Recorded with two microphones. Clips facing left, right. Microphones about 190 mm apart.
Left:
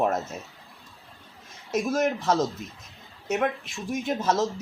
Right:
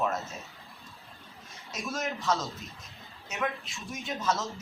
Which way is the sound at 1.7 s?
50° left (ahead or behind).